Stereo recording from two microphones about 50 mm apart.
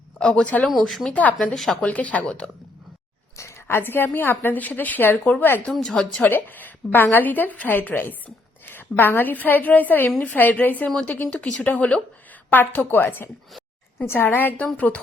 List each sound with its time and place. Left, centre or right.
0.2 s speech: centre
0.8 s speech: centre
1.1 s a woman's voice: left
1.5 s a woman's voice: centre
1.8 s a woman's voice: left
3.7 s a woman's voice: left
5.8 s a woman's voice: centre
6.2 s a woman's voice: left
11.3 s speech: centre
11.6 s speech: left
12.5 s a woman's voice: left